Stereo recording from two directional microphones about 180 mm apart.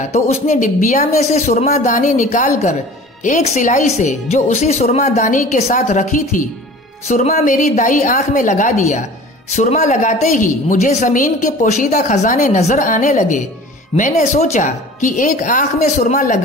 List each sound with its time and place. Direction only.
0.1 s a woman's voice: 40° left (ahead or behind)